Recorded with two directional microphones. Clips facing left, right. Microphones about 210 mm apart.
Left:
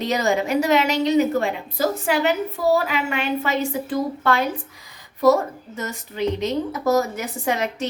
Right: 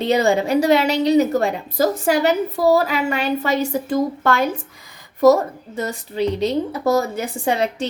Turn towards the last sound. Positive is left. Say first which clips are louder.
# right 3 dB
turn(degrees=-30)  # may be behind; listen again after turning